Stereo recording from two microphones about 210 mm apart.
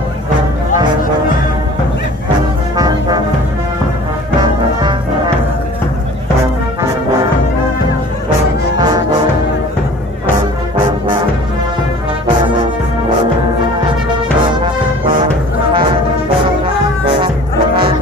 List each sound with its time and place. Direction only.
2.7 s music: 20° right (ahead or behind)
8.7 s music: 20° right (ahead or behind)